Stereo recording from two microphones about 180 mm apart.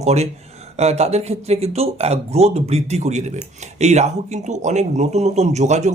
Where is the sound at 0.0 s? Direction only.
35° right (ahead or behind).